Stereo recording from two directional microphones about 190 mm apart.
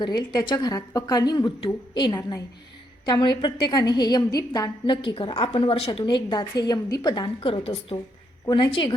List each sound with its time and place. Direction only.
0.0 s a woman's voice: 25° left (ahead or behind)